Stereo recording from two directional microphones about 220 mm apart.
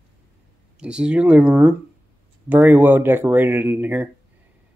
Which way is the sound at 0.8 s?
5° right (ahead or behind).